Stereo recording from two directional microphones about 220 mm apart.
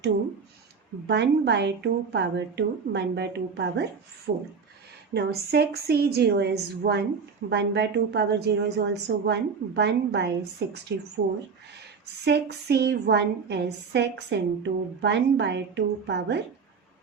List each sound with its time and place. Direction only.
1.0 s a woman's voice: 50° right (ahead or behind)
4.3 s a woman's voice: 35° right (ahead or behind)
12.2 s a woman's voice: 50° right (ahead or behind)